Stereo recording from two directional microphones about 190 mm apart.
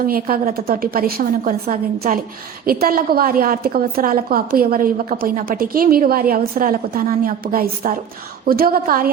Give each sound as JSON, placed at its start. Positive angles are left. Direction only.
{"t": 0.0, "sound": "a woman's voice", "side_deg": -50}